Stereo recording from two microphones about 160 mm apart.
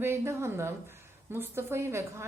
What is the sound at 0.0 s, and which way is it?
A woman's voice, 15° right (ahead or behind).